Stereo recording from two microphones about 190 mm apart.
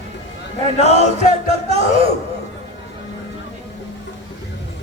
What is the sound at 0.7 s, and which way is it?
Music, 35° left (ahead or behind).